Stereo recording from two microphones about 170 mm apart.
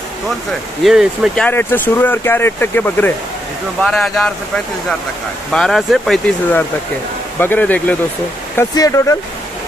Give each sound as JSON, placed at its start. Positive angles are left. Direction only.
{"t": 0.8, "sound": "speech", "side_deg": 0}
{"t": 5.5, "sound": "speech", "side_deg": 0}
{"t": 8.5, "sound": "speech", "side_deg": 20}